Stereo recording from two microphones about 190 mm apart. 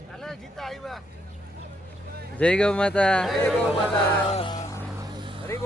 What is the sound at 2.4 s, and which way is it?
Speech, 5° left (ahead or behind).